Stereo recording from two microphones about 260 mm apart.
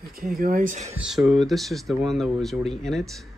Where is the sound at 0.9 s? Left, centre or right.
Centre.